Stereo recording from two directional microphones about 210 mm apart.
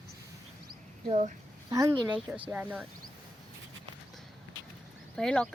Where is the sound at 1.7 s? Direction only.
15° right (ahead or behind).